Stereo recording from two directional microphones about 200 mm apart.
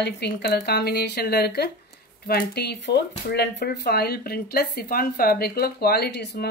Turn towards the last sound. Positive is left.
turn(degrees=55)  # may be behind; listen again after turning